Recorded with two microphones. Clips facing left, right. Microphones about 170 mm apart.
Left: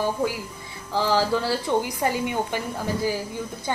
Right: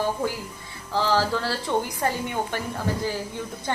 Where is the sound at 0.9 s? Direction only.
15° left (ahead or behind).